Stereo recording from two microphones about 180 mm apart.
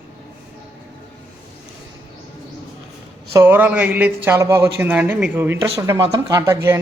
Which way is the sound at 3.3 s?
10° right (ahead or behind).